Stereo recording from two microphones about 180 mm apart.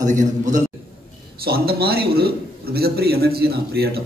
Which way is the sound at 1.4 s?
60° right (ahead or behind).